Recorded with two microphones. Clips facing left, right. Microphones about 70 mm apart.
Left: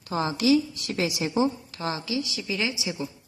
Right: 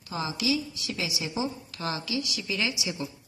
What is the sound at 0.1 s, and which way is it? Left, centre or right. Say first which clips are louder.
A woman's voice: left 7 dB; left.